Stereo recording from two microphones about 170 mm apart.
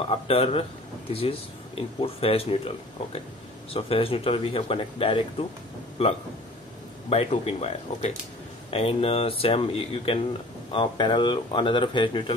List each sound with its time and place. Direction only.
0.1 s speech: 35° left (ahead or behind)
3.7 s a man's voice: 35° left (ahead or behind)